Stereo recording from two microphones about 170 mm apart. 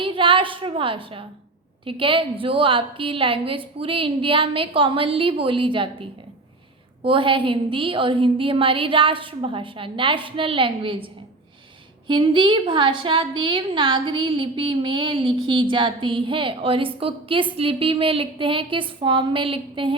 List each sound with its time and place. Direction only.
0.0 s a woman's voice: 30° right (ahead or behind)